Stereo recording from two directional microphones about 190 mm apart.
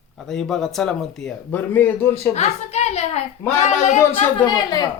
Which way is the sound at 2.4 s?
35° left (ahead or behind).